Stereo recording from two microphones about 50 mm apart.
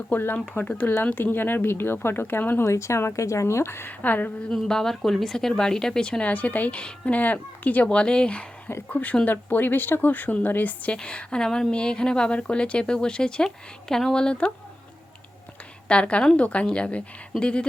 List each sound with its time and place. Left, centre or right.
0.1 s speech: left
1.2 s speech: left
2.6 s speech: left
3.8 s speech: left
4.5 s speech: centre; by 6.7 s left
6.7 s speech: left
7.9 s speech: centre; by 10.9 s left
10.9 s speech: left
15.9 s speech: left